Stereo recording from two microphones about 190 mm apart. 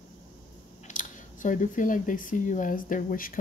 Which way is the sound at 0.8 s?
40° left (ahead or behind).